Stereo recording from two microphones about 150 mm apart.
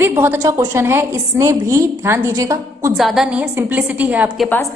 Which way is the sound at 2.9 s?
Centre (ahead or behind).